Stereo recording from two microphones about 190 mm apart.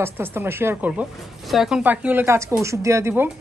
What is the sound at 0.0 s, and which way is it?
A woman's voice, 10° right (ahead or behind).